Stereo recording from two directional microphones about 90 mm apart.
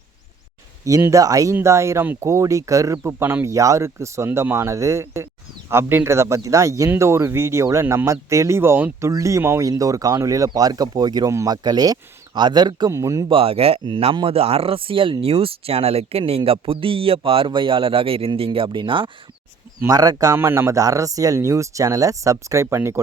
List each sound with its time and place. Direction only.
0.9 s speech: 35° right (ahead or behind); by 12.9 s 55° right (ahead or behind)
12.9 s speech: 35° right (ahead or behind)
13.2 s speech: 85° right
13.8 s a man's voice: 60° right (ahead or behind)
19.9 s speech: 40° right (ahead or behind)